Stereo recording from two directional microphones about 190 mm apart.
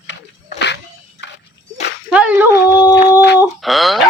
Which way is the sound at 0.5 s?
65° left (ahead or behind).